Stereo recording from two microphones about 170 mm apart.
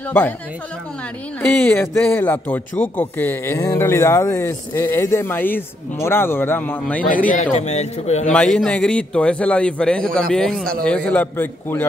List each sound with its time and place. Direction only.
1.4 s speech: 10° left (ahead or behind)
7.2 s a man's voice: 45° left (ahead or behind)
8.3 s a man's voice: 5° left (ahead or behind)